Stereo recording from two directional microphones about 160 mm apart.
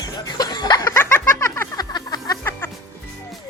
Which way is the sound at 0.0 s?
25° left (ahead or behind).